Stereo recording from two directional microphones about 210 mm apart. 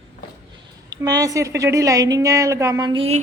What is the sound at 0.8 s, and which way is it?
A woman's voice, 15° right (ahead or behind).